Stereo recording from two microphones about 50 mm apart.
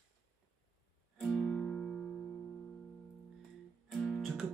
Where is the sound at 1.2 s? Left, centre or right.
Centre.